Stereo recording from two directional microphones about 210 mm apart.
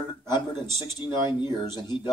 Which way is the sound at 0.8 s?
20° left (ahead or behind).